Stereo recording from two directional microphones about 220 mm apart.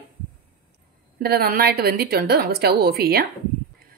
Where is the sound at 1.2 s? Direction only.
45° right (ahead or behind).